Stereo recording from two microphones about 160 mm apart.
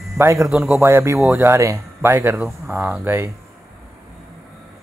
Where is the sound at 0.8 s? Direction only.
15° right (ahead or behind).